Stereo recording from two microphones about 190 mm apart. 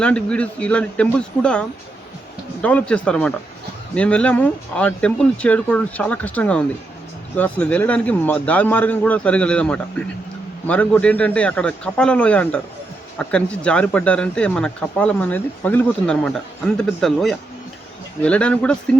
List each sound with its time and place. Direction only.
0.0 s speech: 5° left (ahead or behind)